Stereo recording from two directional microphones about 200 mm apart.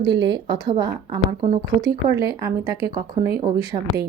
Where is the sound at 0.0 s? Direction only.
20° right (ahead or behind).